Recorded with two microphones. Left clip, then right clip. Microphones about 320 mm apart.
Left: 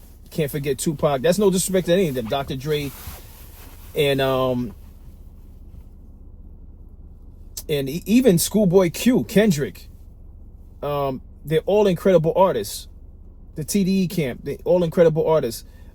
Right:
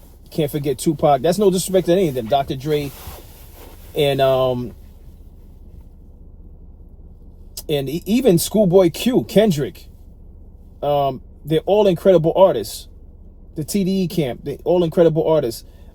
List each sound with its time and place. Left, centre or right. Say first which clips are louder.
0.3 s speech: right 3 dB; right
3.9 s speech: right 4 dB; right
7.5 s speech: right 3 dB; right